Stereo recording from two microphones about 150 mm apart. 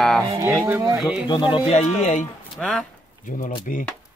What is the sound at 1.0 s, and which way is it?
Speech, 5° right (ahead or behind).